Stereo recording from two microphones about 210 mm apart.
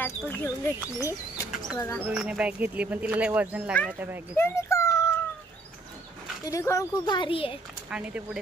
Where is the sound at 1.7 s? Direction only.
10° left (ahead or behind).